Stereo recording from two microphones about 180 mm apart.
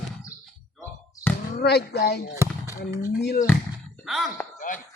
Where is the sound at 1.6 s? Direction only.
65° left (ahead or behind).